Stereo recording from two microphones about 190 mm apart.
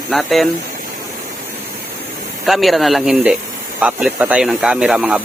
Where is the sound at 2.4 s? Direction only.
Centre (ahead or behind).